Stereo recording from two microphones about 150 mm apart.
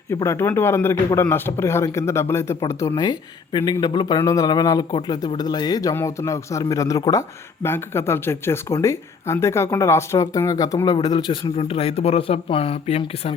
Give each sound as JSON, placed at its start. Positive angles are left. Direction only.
{"t": 0.1, "sound": "a man's voice", "side_deg": 15}